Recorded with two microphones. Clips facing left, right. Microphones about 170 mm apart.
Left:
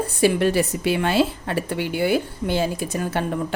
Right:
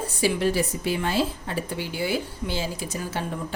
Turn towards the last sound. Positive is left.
turn(degrees=60)  # may be behind; listen again after turning